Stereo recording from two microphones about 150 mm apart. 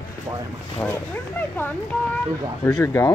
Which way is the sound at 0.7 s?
10° left (ahead or behind).